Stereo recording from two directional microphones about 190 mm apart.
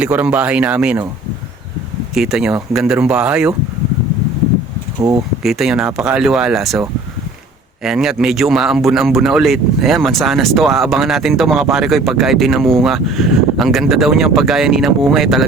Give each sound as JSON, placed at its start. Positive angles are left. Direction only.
{"t": 0.0, "sound": "speech", "side_deg": -5}
{"t": 2.1, "sound": "speech", "side_deg": -5}
{"t": 4.9, "sound": "speech", "side_deg": -20}
{"t": 5.4, "sound": "speech", "side_deg": 0}
{"t": 7.9, "sound": "speech", "side_deg": 0}